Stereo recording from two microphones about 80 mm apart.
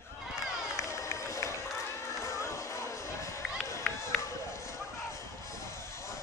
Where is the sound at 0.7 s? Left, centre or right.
Left.